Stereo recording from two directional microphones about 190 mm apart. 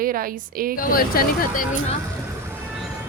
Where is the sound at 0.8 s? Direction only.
50° left (ahead or behind).